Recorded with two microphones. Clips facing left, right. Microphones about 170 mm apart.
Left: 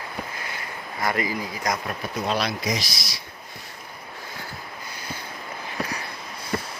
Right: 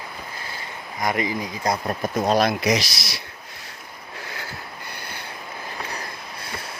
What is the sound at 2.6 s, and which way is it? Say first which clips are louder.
Speech: right 6 dB; 75° right (ahead or behind).